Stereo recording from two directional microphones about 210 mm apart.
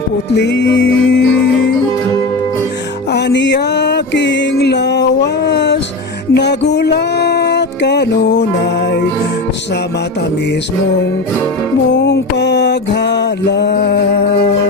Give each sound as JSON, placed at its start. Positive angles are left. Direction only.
{"t": 0.3, "sound": "music", "side_deg": 55}
{"t": 3.1, "sound": "music", "side_deg": 55}
{"t": 6.3, "sound": "a sound", "side_deg": 55}
{"t": 11.9, "sound": "music", "side_deg": 55}